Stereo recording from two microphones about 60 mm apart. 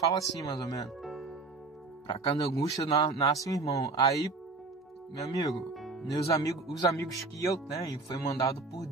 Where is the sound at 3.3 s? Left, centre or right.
Left.